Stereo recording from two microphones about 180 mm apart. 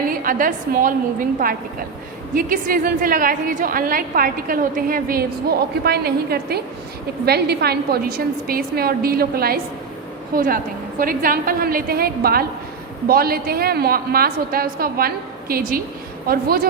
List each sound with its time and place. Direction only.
0.1 s a woman's voice: 50° right (ahead or behind)
2.3 s a woman's voice: 50° right (ahead or behind)